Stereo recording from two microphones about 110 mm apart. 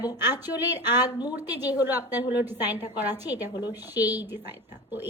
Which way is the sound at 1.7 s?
20° right (ahead or behind).